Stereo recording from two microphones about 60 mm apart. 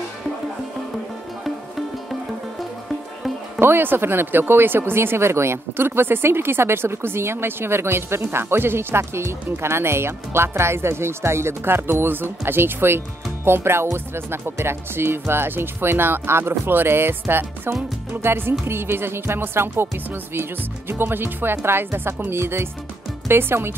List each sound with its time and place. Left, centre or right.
1.4 s music: centre
3.5 s speech: right
20.9 s speech: right